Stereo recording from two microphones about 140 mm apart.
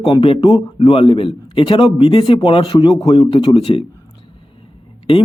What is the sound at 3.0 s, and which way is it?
Speech, 30° left (ahead or behind).